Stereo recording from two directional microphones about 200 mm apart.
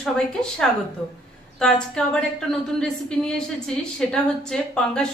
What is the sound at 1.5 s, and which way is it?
A woman's voice, 5° left (ahead or behind).